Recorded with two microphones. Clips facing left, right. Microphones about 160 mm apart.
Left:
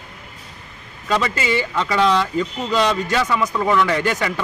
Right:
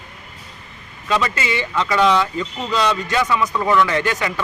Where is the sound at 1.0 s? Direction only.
35° left (ahead or behind).